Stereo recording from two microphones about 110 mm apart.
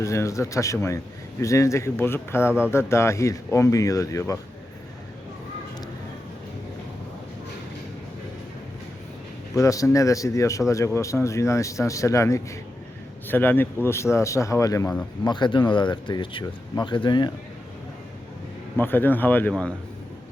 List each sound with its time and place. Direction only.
0.0 s speech: 25° left (ahead or behind)
9.6 s speech: 30° left (ahead or behind)
13.2 s speech: 15° left (ahead or behind)
15.2 s speech: 45° left (ahead or behind)
18.8 s speech: 20° left (ahead or behind)